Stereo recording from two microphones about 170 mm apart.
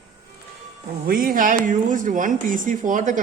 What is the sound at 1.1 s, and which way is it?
Speech, 60° right (ahead or behind).